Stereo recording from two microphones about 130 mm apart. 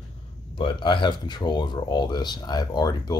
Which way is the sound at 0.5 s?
40° left (ahead or behind).